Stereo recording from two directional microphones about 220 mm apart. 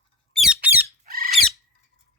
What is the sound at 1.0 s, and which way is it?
Squawk, 40° right (ahead or behind).